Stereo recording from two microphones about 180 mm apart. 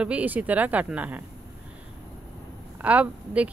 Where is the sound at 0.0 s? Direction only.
10° right (ahead or behind).